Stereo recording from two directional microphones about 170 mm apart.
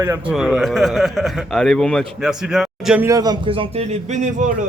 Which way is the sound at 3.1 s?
25° right (ahead or behind).